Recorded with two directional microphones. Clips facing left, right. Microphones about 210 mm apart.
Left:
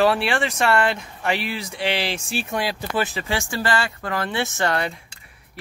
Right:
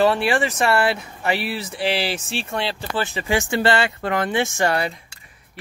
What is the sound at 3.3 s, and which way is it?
Speech, 20° right (ahead or behind).